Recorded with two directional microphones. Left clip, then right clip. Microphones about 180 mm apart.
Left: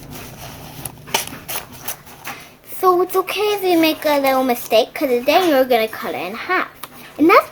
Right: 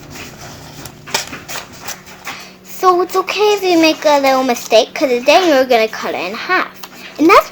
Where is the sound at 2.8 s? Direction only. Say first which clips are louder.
Right 3 dB; 25° right (ahead or behind).